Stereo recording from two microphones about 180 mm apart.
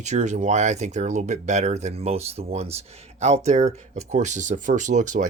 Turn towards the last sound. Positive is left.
turn(degrees=-45)  # may be behind; listen again after turning